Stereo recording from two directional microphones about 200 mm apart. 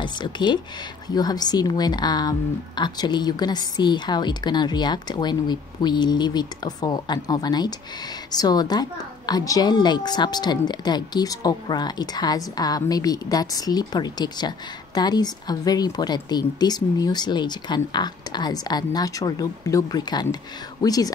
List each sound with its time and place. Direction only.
0.0 s speech: 20° left (ahead or behind)